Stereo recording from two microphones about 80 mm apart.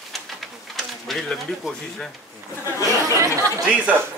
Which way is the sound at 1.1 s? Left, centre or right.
Centre.